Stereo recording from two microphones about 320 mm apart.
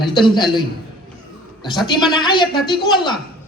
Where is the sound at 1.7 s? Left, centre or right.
Centre.